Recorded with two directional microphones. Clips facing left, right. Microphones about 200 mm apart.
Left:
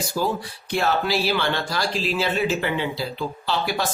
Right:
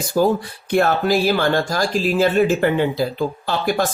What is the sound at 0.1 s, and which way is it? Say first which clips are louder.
Speech: right 11 dB; 50° right (ahead or behind).